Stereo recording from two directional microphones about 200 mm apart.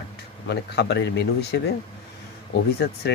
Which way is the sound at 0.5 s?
55° left (ahead or behind).